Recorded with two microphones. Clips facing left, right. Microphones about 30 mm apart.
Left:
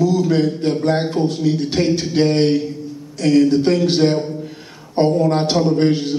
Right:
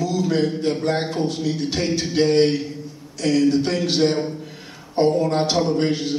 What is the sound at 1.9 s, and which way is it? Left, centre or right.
Speech, centre.